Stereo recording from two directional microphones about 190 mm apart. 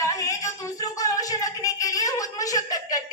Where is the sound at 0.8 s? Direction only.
20° left (ahead or behind).